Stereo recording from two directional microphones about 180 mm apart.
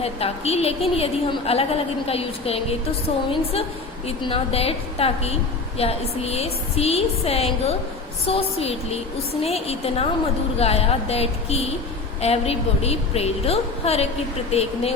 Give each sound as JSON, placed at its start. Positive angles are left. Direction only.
{"t": 0.0, "sound": "a woman's voice", "side_deg": 35}
{"t": 4.0, "sound": "a woman's voice", "side_deg": 30}